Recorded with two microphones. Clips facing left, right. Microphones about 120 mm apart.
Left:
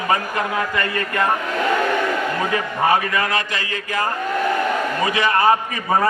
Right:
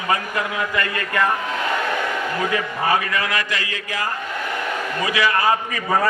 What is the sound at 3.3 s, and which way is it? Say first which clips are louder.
Speech: left 1 dB; 30° left (ahead or behind).